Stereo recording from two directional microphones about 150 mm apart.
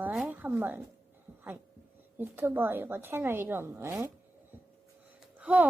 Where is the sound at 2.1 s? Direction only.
15° right (ahead or behind).